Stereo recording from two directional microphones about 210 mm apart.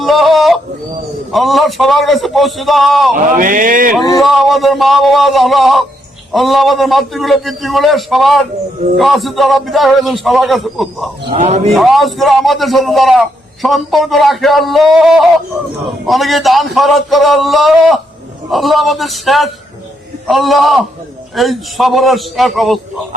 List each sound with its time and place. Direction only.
0.0 s music: centre (ahead or behind)
1.3 s a man's voice: centre (ahead or behind)
3.2 s speech: 40° right (ahead or behind)
4.2 s a man's voice: centre (ahead or behind)
11.3 s speech: 30° right (ahead or behind)
11.7 s a man's voice: centre (ahead or behind)